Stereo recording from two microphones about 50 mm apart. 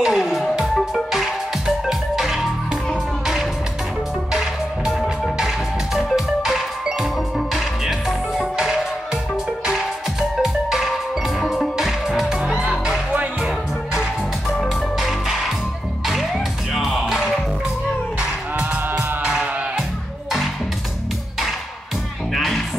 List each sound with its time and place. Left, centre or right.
0.0 s music: centre
1.9 s music: centre
4.3 s music: centre
10.4 s music: centre
12.4 s music: centre
15.0 s music: centre
16.7 s music: centre
18.6 s music: centre
22.3 s music: centre